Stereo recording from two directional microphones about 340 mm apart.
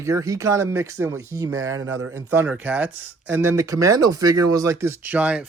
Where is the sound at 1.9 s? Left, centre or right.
Right.